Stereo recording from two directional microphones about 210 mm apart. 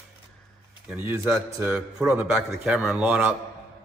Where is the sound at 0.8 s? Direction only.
10° right (ahead or behind).